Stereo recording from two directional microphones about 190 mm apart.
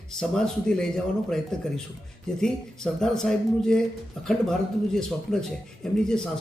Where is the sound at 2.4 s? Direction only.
5° left (ahead or behind).